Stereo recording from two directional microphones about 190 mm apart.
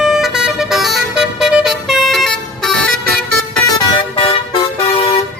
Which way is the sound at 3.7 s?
20° left (ahead or behind).